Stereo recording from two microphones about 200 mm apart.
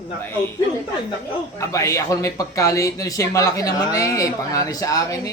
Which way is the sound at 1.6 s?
15° left (ahead or behind).